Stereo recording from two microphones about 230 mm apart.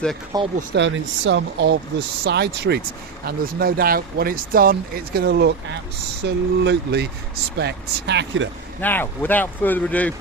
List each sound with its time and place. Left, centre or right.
0.3 s speech: centre
0.7 s speech: right
8.8 s speech: centre